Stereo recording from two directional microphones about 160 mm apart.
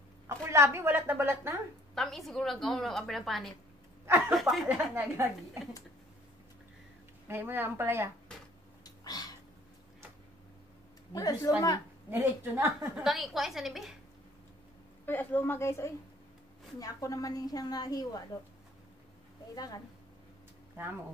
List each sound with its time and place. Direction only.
0.3 s a woman's voice: 15° right (ahead or behind)
2.0 s a woman's voice: centre (ahead or behind)
4.9 s a woman's voice: 15° right (ahead or behind)
7.2 s a woman's voice: 15° right (ahead or behind)
8.8 s a sound: 25° left (ahead or behind)
11.1 s a woman's voice: 25° left (ahead or behind)
12.1 s a woman's voice: 15° right (ahead or behind)
13.0 s a woman's voice: centre (ahead or behind)
15.0 s a woman's voice: 10° left (ahead or behind)
19.5 s a woman's voice: 20° left (ahead or behind)